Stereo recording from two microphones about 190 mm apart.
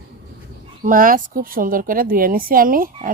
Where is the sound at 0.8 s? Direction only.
45° right (ahead or behind).